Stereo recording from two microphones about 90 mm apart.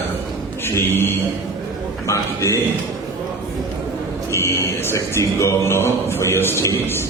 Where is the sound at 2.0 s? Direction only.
35° left (ahead or behind).